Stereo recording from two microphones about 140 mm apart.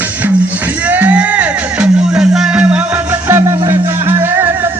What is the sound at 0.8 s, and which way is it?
Music, 10° right (ahead or behind).